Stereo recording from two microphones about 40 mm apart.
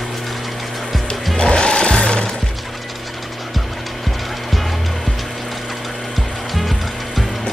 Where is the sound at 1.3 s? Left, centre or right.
Centre.